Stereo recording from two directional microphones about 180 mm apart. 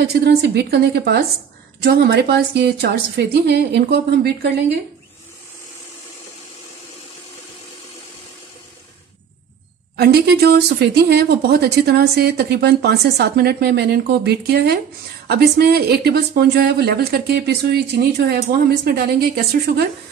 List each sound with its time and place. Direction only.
0.0 s speech: 65° right (ahead or behind)
9.9 s speech: 65° right (ahead or behind)